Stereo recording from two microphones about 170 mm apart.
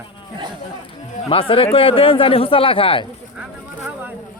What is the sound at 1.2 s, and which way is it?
Speech, 30° left (ahead or behind).